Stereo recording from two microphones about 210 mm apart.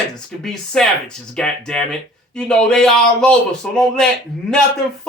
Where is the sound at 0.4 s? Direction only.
5° left (ahead or behind).